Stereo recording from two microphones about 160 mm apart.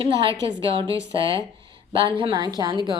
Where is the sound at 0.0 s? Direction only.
30° right (ahead or behind).